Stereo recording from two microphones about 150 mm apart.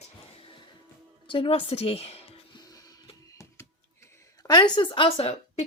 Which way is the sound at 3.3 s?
20° left (ahead or behind).